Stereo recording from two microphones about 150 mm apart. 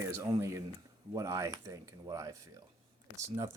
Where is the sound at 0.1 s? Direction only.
20° right (ahead or behind).